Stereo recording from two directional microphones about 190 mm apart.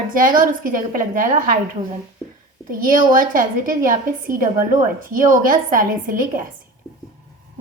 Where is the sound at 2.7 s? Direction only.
45° right (ahead or behind).